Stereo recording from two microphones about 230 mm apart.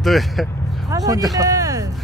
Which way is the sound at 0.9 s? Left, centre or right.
Centre.